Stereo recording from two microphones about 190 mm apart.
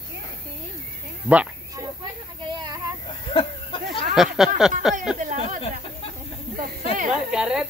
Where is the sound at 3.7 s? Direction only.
30° left (ahead or behind).